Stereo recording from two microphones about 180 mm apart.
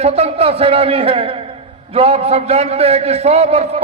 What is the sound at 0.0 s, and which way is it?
A man's voice, 35° right (ahead or behind).